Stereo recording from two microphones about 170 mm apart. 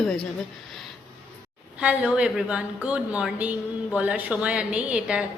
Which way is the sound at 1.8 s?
5° right (ahead or behind).